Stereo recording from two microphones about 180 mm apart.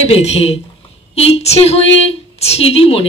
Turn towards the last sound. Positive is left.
turn(degrees=35)  # may be behind; listen again after turning